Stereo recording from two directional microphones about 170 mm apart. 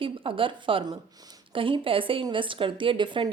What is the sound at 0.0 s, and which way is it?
A woman's voice, 30° right (ahead or behind).